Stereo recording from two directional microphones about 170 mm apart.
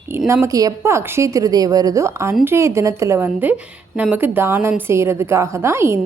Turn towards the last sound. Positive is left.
turn(degrees=-15)  # may be behind; listen again after turning